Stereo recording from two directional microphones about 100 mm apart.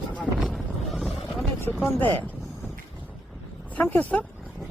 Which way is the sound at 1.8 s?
20° left (ahead or behind).